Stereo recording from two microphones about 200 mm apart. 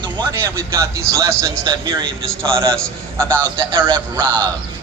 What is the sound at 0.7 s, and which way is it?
Speech, 15° right (ahead or behind).